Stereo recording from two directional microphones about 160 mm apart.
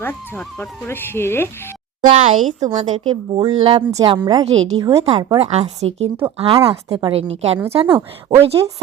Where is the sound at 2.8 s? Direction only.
30° right (ahead or behind).